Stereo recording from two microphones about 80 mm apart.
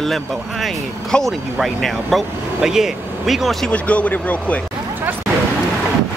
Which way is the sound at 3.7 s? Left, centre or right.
Centre.